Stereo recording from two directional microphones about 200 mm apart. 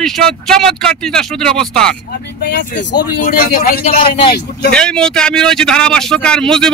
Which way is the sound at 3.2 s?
45° left (ahead or behind).